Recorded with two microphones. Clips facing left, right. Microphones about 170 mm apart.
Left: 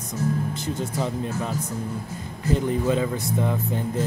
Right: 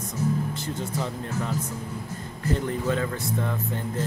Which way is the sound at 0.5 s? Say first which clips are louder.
Left 3 dB; 15° left (ahead or behind).